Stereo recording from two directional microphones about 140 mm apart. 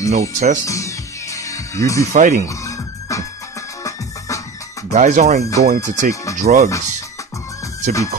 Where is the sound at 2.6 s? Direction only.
20° left (ahead or behind).